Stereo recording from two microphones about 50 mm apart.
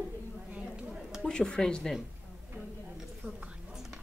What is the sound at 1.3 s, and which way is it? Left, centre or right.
Speech, centre.